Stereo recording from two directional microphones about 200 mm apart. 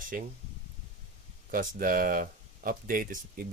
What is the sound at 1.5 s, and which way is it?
Speech, 45° right (ahead or behind).